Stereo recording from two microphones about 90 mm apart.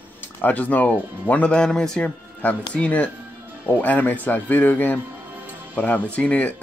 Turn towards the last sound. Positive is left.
turn(degrees=15)  # may be behind; listen again after turning